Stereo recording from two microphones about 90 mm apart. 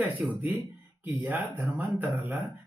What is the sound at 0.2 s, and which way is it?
Speech, 10° right (ahead or behind).